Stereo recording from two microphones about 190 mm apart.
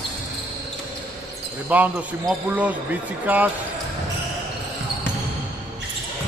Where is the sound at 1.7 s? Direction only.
10° right (ahead or behind).